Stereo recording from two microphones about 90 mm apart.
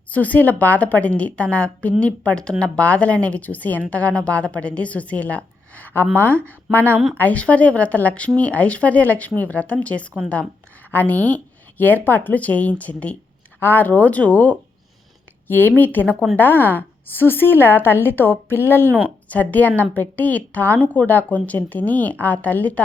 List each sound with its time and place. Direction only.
0.1 s a woman's voice: 15° left (ahead or behind)
6.4 s speech: 25° right (ahead or behind)
7.2 s a woman's voice: 15° left (ahead or behind)